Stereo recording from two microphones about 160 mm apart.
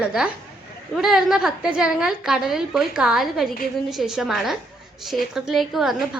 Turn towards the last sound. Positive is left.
turn(degrees=0)  # may be behind; listen again after turning